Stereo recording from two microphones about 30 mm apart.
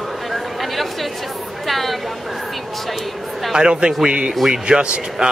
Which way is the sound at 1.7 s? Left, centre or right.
Centre.